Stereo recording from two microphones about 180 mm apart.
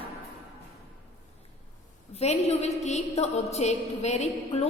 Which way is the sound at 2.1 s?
35° left (ahead or behind).